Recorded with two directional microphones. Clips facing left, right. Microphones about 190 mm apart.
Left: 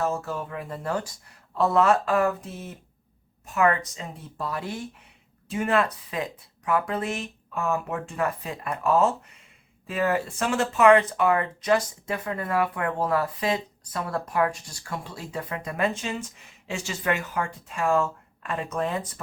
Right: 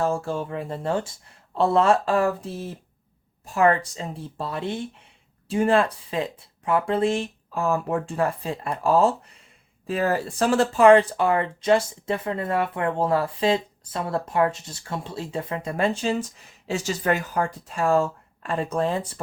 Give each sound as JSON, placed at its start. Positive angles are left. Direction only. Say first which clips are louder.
{"t": 0.0, "sound": "speech", "louder": "right 3 dB", "side_deg": -30}